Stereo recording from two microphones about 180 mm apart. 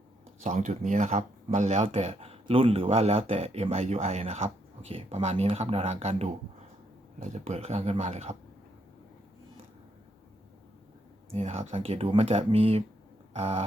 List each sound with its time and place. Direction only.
0.4 s speech: 45° right (ahead or behind)
11.3 s speech: 35° right (ahead or behind)